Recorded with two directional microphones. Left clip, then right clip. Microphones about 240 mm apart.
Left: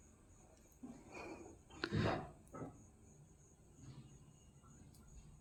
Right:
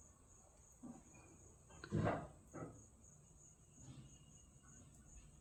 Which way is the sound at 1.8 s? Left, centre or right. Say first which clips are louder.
Left 5 dB; left.